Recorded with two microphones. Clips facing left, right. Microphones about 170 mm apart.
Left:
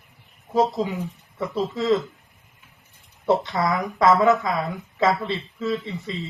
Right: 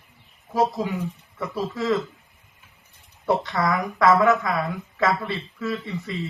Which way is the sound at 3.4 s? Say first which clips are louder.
Even; 20° left (ahead or behind).